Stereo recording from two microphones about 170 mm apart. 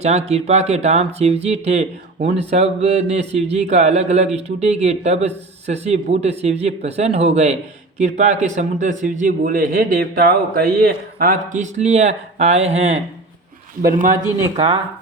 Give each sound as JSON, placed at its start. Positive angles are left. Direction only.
{"t": 0.0, "sound": "speech", "side_deg": -40}
{"t": 13.8, "sound": "speech", "side_deg": -55}
{"t": 14.5, "sound": "speech", "side_deg": -30}